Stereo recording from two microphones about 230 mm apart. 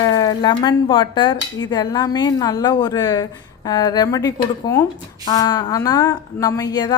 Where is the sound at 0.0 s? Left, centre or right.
Centre.